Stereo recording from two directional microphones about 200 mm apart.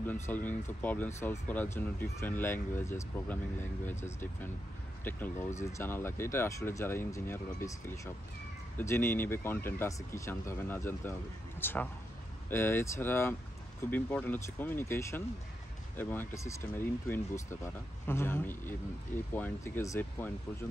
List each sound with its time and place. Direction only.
0.0 s speech: 10° left (ahead or behind)